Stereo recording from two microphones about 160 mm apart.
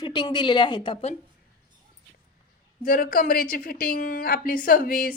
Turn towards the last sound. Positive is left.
turn(degrees=60)  # may be behind; listen again after turning